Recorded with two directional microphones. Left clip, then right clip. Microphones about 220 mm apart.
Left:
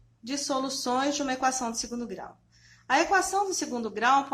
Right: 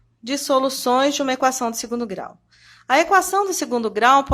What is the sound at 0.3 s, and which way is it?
A woman's voice, 45° right (ahead or behind).